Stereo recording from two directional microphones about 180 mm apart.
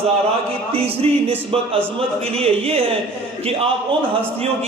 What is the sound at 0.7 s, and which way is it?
Music, 30° right (ahead or behind).